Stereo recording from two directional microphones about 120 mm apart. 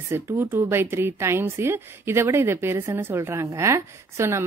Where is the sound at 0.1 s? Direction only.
20° right (ahead or behind).